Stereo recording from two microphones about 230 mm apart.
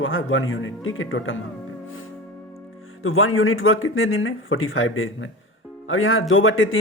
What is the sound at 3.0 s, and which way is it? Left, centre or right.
Speech, left.